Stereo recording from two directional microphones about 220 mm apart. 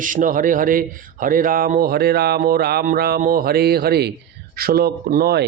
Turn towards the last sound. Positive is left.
turn(degrees=-45)  # may be behind; listen again after turning